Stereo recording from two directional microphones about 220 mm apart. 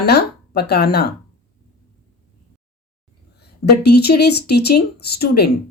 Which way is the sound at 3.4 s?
45° left (ahead or behind).